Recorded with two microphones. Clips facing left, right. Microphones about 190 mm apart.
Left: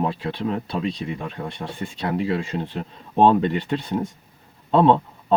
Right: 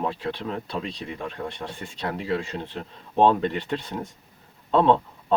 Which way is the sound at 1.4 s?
30° left (ahead or behind).